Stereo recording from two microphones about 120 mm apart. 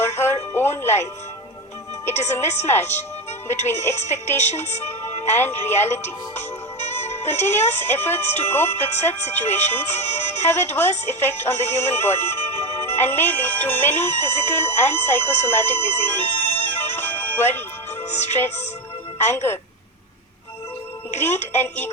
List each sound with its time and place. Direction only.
0.0 s music: 20° left (ahead or behind)
2.0 s speech: 20° left (ahead or behind)
21.2 s speech: 20° left (ahead or behind)